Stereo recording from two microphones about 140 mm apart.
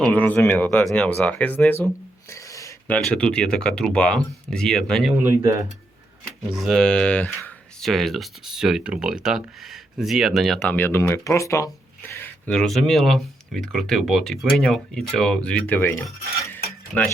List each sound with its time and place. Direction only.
0.0 s speech: 10° left (ahead or behind)
2.3 s a sound: 20° left (ahead or behind)
2.8 s speech: 10° left (ahead or behind)
6.5 s speech: centre (ahead or behind); by 12.3 s 20° left (ahead or behind)
12.5 s speech: 5° left (ahead or behind)
16.5 s cutlery: 10° left (ahead or behind)